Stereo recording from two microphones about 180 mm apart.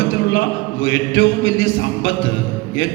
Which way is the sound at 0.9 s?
90° left.